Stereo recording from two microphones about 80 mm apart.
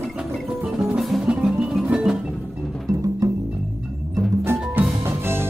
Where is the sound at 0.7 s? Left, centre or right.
Centre.